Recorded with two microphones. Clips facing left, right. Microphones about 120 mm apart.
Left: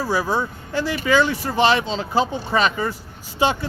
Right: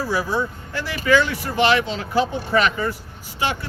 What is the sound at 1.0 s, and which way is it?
Speech, 25° left (ahead or behind).